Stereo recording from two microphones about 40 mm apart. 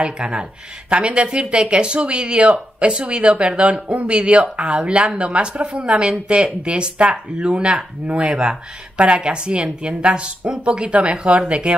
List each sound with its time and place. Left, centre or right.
0.0 s speech: right